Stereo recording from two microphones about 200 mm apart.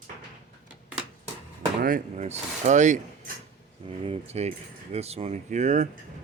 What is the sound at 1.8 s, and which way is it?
Speech, 40° right (ahead or behind).